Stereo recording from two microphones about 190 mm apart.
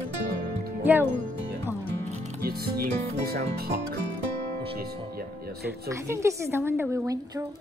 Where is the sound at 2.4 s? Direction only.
55° right (ahead or behind).